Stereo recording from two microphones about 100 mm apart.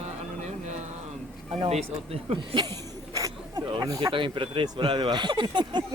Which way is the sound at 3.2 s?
35° right (ahead or behind).